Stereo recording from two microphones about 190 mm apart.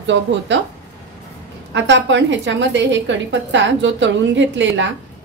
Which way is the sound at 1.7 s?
70° right (ahead or behind).